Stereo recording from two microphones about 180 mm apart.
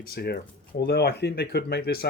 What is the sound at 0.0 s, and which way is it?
Speech, 60° left (ahead or behind).